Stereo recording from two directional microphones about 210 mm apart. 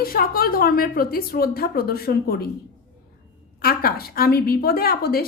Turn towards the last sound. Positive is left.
turn(degrees=45)  # may be behind; listen again after turning